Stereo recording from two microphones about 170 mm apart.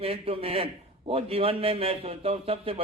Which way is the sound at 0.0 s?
35° right (ahead or behind).